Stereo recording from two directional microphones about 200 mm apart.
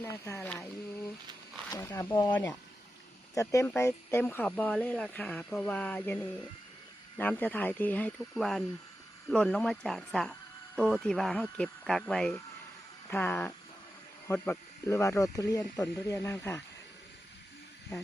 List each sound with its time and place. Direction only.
0.0 s speech: 10° left (ahead or behind)
7.2 s speech: 10° left (ahead or behind)